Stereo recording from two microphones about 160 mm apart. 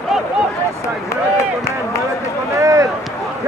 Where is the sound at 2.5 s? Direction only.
20° right (ahead or behind).